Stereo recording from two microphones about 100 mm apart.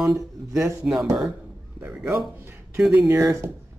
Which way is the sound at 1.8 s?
15° right (ahead or behind).